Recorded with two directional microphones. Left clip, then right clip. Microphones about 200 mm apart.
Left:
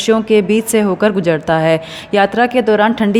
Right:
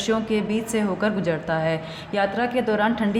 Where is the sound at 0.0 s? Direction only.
40° left (ahead or behind).